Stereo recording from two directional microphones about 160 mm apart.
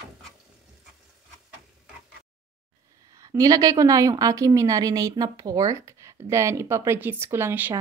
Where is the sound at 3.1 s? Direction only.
20° right (ahead or behind).